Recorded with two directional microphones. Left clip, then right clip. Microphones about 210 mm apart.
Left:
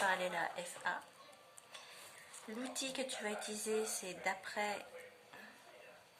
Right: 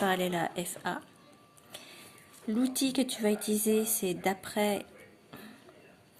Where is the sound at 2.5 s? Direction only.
45° right (ahead or behind).